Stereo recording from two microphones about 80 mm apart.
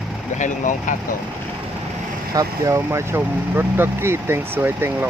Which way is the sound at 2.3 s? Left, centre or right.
Right.